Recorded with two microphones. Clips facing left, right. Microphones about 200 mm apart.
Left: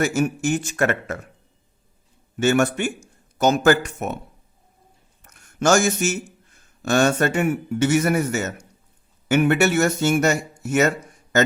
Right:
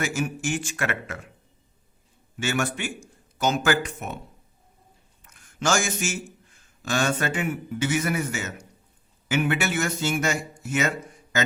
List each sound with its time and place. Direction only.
0.0 s a man's voice: 40° left (ahead or behind)
2.3 s a man's voice: 40° left (ahead or behind)
5.2 s a man's voice: 40° left (ahead or behind)
10.3 s speech: 70° left (ahead or behind)
10.7 s speech: 45° left (ahead or behind)